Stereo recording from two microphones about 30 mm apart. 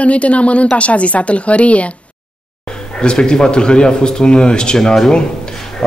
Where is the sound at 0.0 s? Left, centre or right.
Left.